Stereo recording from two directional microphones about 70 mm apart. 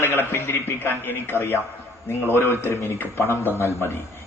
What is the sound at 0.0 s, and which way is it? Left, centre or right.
A man's voice, left.